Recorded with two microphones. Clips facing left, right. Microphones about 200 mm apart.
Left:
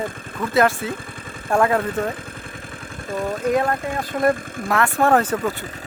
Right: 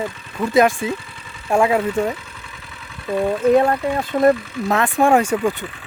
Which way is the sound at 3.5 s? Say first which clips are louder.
Right 5 dB; 25° right (ahead or behind).